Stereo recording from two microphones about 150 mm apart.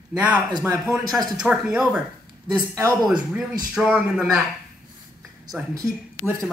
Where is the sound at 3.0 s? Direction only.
5° right (ahead or behind).